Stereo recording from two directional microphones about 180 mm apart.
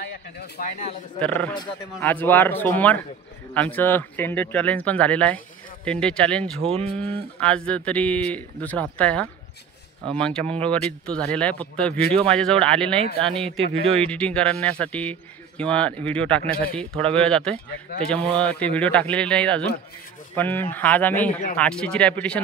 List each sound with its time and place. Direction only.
0.4 s speech: 50° left (ahead or behind)
1.2 s a man's voice: 5° left (ahead or behind)
6.6 s speech: 35° right (ahead or behind)
7.0 s a man's voice: 10° left (ahead or behind)